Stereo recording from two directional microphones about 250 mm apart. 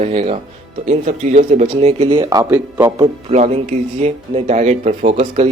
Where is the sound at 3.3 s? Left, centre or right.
Right.